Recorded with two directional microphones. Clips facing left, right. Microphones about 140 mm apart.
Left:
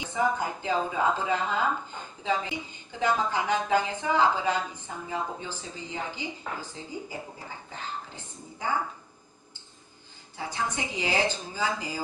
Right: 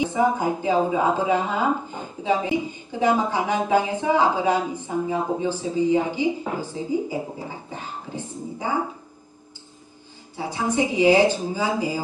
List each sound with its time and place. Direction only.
0.0 s speech: 15° right (ahead or behind)
10.3 s speech: 15° right (ahead or behind)